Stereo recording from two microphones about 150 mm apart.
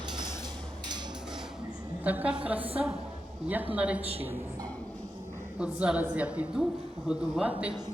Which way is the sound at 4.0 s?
40° right (ahead or behind).